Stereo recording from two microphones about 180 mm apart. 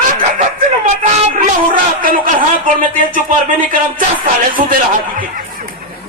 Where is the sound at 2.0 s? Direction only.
50° right (ahead or behind).